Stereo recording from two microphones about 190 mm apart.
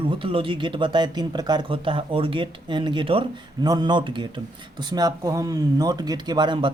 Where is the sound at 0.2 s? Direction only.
30° right (ahead or behind).